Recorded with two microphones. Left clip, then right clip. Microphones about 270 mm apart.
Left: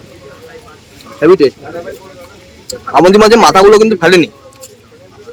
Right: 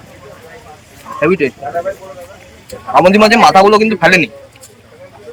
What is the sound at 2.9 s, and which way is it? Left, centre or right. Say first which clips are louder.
A man's voice: left 2 dB; centre.